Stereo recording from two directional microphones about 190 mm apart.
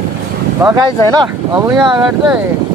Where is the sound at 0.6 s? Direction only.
25° right (ahead or behind).